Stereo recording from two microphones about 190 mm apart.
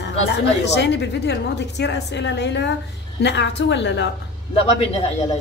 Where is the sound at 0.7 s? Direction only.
65° left (ahead or behind).